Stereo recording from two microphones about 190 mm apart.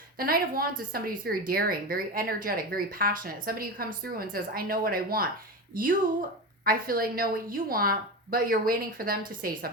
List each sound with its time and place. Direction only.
0.2 s a woman's voice: 50° right (ahead or behind)